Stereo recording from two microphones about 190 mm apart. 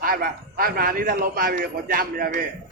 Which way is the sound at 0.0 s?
50° right (ahead or behind).